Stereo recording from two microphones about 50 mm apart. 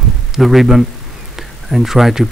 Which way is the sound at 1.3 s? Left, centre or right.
Centre.